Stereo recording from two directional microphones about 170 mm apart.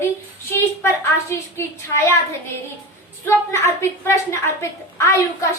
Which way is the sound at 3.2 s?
15° left (ahead or behind).